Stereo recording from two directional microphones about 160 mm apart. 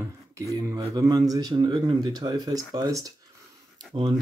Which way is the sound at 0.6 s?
20° right (ahead or behind).